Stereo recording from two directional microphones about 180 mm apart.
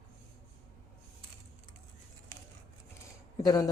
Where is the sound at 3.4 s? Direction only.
20° left (ahead or behind).